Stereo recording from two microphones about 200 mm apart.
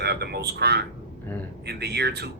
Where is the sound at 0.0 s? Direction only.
55° right (ahead or behind).